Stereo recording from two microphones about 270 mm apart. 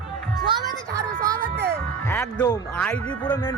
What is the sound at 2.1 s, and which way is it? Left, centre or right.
Speech, centre.